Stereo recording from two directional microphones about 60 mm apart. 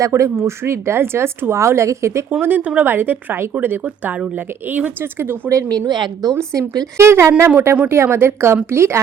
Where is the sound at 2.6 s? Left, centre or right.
Right.